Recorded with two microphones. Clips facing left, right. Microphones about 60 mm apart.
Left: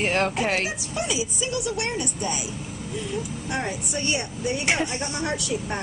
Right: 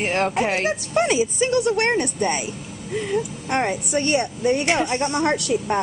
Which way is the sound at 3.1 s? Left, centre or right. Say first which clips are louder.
Right 7 dB; right.